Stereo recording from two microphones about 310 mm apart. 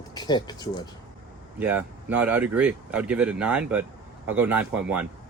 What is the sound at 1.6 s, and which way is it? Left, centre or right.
Speech, centre.